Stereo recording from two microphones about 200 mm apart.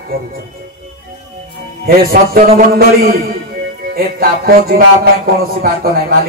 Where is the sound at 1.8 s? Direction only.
50° right (ahead or behind).